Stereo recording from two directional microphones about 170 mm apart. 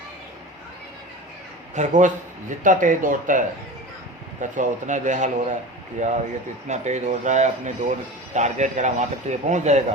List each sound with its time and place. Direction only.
1.7 s speech: 45° right (ahead or behind)